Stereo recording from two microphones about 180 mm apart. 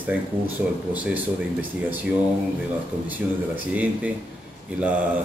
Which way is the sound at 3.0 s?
10° right (ahead or behind).